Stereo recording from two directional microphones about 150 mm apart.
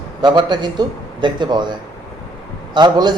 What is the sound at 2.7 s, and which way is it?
Speech, 30° right (ahead or behind).